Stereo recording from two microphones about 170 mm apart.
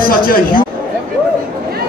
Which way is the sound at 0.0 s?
55° left (ahead or behind).